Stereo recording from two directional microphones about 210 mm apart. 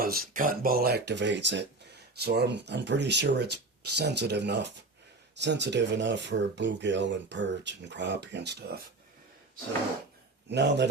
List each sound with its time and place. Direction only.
0.0 s speech: 45° right (ahead or behind)
10.5 s speech: 55° right (ahead or behind)